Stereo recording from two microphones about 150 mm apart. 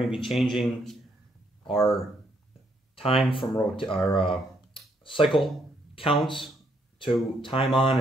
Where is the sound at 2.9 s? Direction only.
40° left (ahead or behind).